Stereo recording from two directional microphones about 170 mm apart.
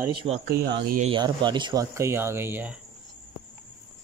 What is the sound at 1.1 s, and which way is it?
Speech, 25° right (ahead or behind).